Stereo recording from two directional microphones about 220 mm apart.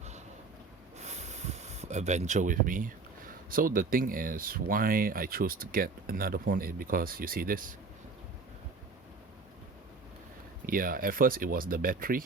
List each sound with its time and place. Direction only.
0.9 s speech: 30° right (ahead or behind)
10.7 s speech: 40° right (ahead or behind)